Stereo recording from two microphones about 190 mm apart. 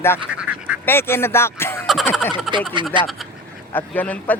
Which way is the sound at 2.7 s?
25° right (ahead or behind).